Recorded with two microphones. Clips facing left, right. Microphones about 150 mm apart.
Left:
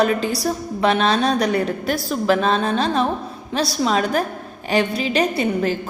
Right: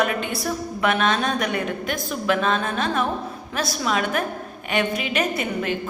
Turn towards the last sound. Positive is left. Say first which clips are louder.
# left 5 dB
turn(degrees=35)  # may be behind; listen again after turning